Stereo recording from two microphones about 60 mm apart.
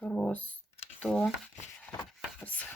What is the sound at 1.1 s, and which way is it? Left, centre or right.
Speech, centre.